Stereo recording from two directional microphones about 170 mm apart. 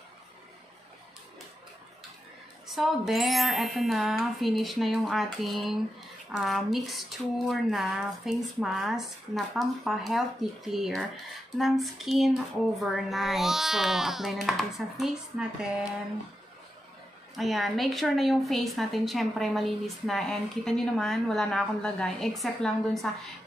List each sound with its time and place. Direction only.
2.7 s a woman's voice: centre (ahead or behind)
17.4 s a woman's voice: centre (ahead or behind)